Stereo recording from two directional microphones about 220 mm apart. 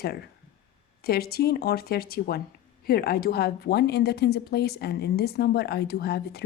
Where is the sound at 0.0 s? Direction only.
45° left (ahead or behind).